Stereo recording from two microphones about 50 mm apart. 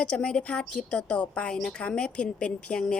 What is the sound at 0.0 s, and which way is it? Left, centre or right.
A woman's voice, centre.